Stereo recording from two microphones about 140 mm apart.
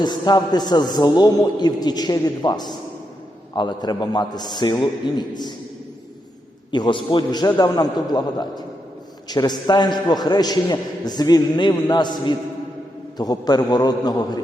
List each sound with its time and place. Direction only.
0.0 s a man's voice: 30° left (ahead or behind)
6.7 s a man's voice: 35° left (ahead or behind)